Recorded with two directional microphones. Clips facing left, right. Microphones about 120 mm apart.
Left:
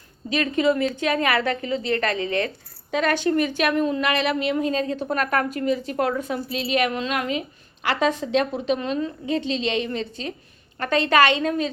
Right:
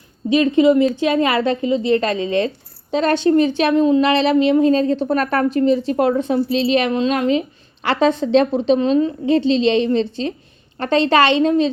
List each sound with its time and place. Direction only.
0.3 s a woman's voice: 25° right (ahead or behind)